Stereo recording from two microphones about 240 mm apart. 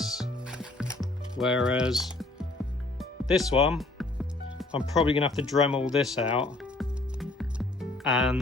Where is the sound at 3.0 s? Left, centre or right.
Centre.